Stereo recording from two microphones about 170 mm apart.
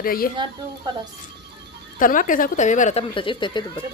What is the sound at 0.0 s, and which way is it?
Speech, 60° left (ahead or behind).